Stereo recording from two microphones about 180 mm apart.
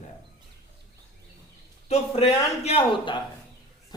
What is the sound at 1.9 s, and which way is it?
A man's voice, 35° left (ahead or behind).